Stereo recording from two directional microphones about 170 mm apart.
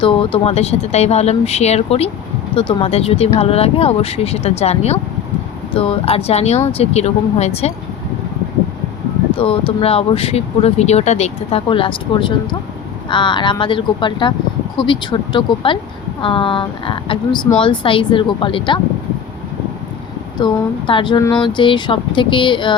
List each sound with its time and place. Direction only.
0.0 s speech: 30° left (ahead or behind)
9.4 s speech: 35° left (ahead or behind)
20.4 s speech: 30° left (ahead or behind)